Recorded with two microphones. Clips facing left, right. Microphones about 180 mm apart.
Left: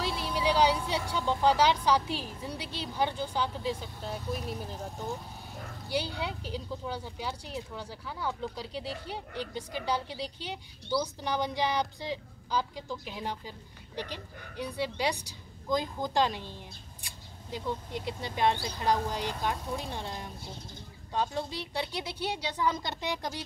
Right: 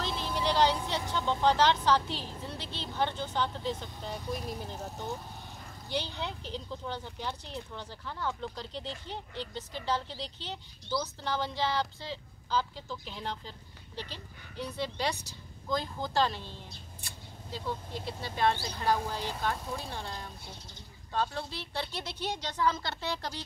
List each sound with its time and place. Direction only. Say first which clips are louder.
0.0 s speech: left 2 dB; 10° left (ahead or behind)
5.9 s speech: left 2 dB; 10° left (ahead or behind)